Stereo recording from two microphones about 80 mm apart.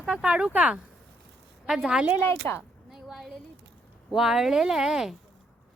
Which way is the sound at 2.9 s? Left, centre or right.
Centre.